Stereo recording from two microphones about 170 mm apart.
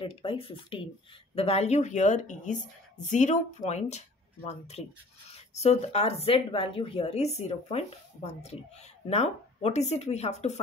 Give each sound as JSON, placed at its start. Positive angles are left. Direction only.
{"t": 0.0, "sound": "a woman's voice", "side_deg": 30}